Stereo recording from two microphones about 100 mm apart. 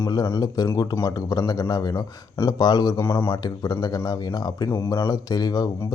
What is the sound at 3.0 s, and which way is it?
Speech, 25° left (ahead or behind).